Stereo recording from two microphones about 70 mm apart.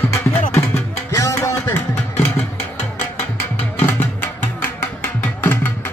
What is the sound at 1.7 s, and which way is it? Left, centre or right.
Music, left.